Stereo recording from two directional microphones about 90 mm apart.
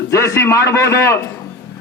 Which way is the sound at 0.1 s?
30° left (ahead or behind).